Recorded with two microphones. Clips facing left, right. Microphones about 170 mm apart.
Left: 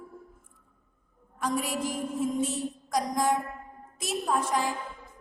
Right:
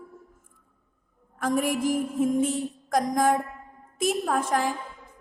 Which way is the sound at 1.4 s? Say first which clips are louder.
Right 5 dB; 50° right (ahead or behind).